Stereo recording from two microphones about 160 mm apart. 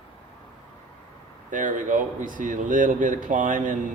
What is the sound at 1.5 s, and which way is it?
Speech, 55° right (ahead or behind).